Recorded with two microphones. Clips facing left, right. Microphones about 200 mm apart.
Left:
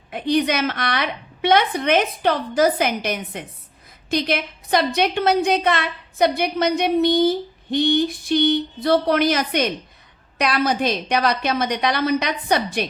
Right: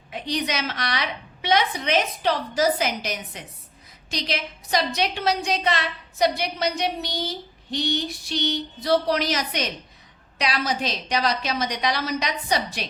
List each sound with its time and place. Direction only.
0.1 s a woman's voice: 55° left (ahead or behind)